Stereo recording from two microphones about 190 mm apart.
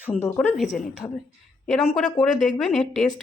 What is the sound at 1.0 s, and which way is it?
Speech, 20° left (ahead or behind).